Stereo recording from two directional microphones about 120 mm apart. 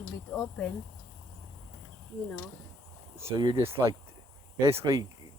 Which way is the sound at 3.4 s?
35° right (ahead or behind).